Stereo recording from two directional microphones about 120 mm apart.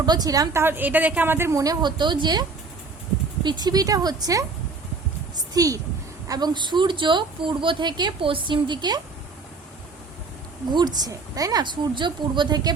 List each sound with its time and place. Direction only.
0.0 s speech: 35° right (ahead or behind)
0.6 s a woman's voice: 15° right (ahead or behind)
5.5 s a woman's voice: 30° right (ahead or behind)
10.7 s speech: 35° right (ahead or behind)